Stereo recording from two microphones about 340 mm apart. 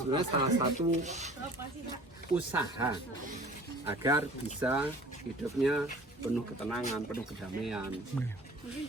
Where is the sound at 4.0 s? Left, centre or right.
Centre.